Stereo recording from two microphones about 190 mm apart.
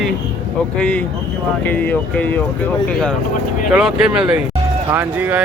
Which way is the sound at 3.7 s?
5° right (ahead or behind).